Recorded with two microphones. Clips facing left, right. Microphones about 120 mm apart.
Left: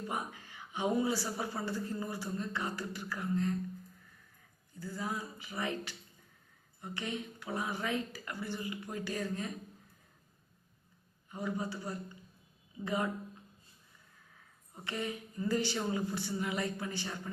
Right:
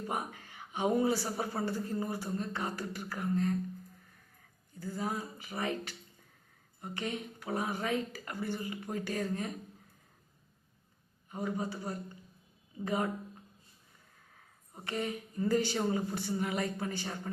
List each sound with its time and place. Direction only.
0.1 s speech: 45° right (ahead or behind)
4.9 s a woman's voice: 35° right (ahead or behind)
6.8 s a woman's voice: 40° right (ahead or behind)
11.3 s a woman's voice: 40° right (ahead or behind)
14.8 s a woman's voice: 40° right (ahead or behind)